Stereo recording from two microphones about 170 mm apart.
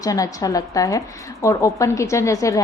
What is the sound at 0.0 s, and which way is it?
A woman's voice, 20° left (ahead or behind).